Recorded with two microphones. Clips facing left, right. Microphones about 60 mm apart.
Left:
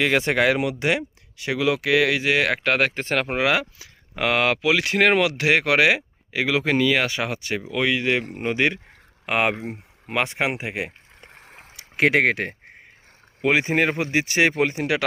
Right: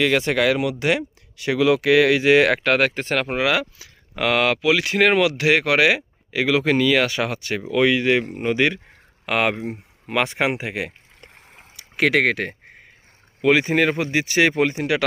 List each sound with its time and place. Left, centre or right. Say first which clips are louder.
0.0 s speech: right 1 dB; left
0.8 s speech: right 2 dB; centre
2.6 s speech: right 2 dB; centre
11.4 s a sound: left 2 dB; left
11.9 s speech: even; centre
14.5 s speech: right 2 dB; centre